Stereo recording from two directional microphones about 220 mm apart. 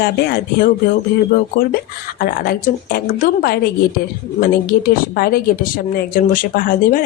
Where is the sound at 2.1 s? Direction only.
40° left (ahead or behind).